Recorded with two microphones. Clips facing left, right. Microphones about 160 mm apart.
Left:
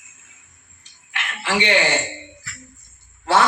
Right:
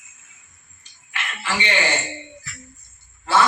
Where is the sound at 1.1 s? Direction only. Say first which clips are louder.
Left 4 dB; 75° left (ahead or behind).